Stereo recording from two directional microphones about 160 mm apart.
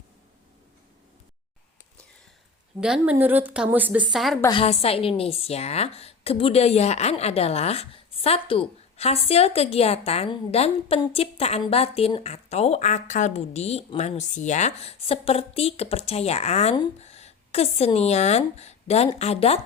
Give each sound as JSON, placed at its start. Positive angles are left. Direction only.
{"t": 2.8, "sound": "a woman's voice", "side_deg": -5}
{"t": 4.4, "sound": "a woman's voice", "side_deg": 35}